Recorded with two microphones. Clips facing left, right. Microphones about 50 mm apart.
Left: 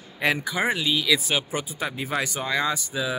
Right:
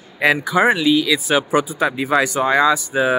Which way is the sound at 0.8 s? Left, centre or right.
Centre.